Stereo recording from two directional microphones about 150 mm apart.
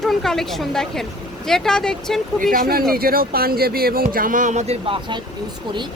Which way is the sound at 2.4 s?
65° right (ahead or behind).